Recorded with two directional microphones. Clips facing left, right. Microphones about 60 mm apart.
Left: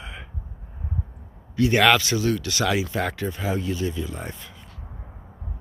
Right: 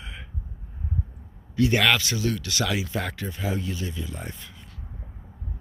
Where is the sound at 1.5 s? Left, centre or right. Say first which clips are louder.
Left 3 dB; left.